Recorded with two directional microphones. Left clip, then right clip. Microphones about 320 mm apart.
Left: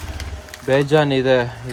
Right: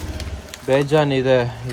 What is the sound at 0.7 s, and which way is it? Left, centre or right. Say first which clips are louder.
Speech: left 1 dB; centre.